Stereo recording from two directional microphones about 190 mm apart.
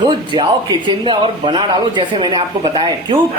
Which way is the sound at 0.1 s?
25° right (ahead or behind).